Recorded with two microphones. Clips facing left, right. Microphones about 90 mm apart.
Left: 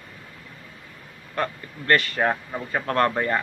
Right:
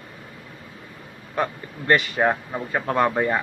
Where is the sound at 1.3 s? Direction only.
15° right (ahead or behind).